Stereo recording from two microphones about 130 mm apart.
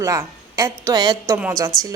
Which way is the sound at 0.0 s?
25° right (ahead or behind).